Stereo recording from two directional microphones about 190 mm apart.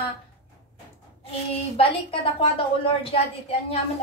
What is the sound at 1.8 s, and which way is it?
A woman's voice, 30° left (ahead or behind).